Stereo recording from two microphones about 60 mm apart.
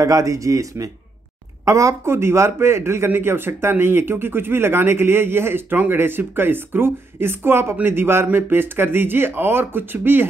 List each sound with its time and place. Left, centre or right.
0.0 s a man's voice: right